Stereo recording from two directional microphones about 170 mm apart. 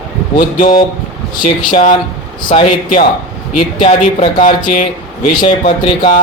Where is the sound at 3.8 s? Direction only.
35° left (ahead or behind).